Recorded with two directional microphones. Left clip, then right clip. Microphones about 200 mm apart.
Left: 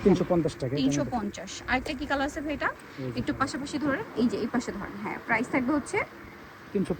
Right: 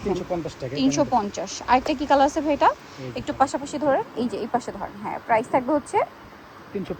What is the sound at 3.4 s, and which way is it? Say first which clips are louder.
A woman's voice: right 10 dB; 15° right (ahead or behind).